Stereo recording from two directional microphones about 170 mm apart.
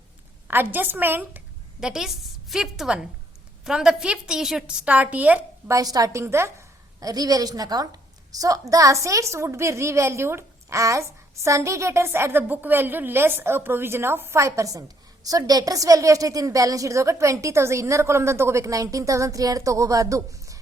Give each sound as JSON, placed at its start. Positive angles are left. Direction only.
{"t": 0.4, "sound": "a woman's voice", "side_deg": -10}
{"t": 5.7, "sound": "a woman's voice", "side_deg": -20}